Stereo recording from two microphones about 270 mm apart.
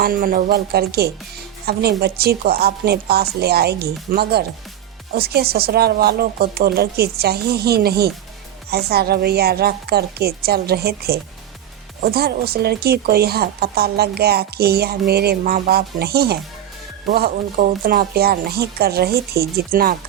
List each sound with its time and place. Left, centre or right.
0.0 s speech: right